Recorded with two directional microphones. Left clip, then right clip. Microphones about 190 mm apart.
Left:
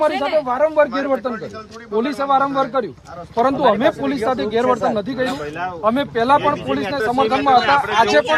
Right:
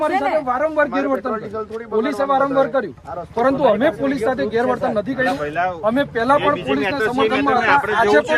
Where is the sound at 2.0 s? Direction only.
25° left (ahead or behind).